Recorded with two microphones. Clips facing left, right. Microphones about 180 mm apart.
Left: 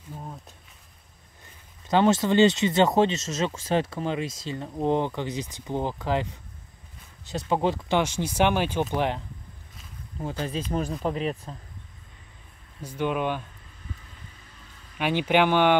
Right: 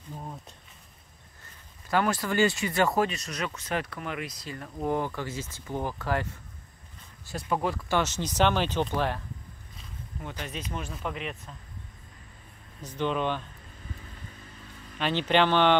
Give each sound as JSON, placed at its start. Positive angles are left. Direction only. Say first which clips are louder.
{"t": 0.1, "sound": "a sound", "louder": "left 1 dB", "side_deg": 0}
{"t": 1.9, "sound": "speech", "louder": "left 6 dB", "side_deg": 25}
{"t": 7.2, "sound": "speech", "louder": "left 4 dB", "side_deg": 25}
{"t": 8.0, "sound": "speech", "louder": "left 1 dB", "side_deg": 10}
{"t": 10.2, "sound": "speech", "louder": "left 8 dB", "side_deg": 30}
{"t": 12.8, "sound": "speech", "louder": "left 2 dB", "side_deg": 10}
{"t": 15.0, "sound": "speech", "louder": "left 2 dB", "side_deg": 10}